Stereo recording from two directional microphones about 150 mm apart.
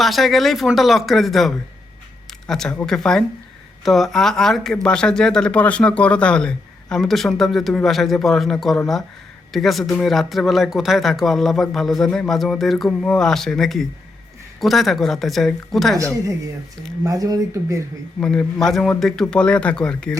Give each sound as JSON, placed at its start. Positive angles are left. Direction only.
{"t": 0.0, "sound": "speech", "side_deg": 0}
{"t": 17.0, "sound": "speech", "side_deg": -25}
{"t": 18.2, "sound": "speech", "side_deg": 5}